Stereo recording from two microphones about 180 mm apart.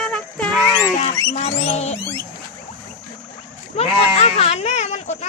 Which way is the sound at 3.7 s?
30° left (ahead or behind).